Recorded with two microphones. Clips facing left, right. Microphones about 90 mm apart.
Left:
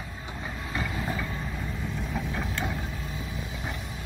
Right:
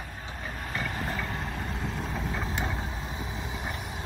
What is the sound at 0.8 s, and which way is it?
Vehicle, 50° right (ahead or behind).